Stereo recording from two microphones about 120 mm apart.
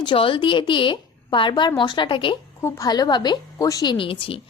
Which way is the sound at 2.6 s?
25° left (ahead or behind).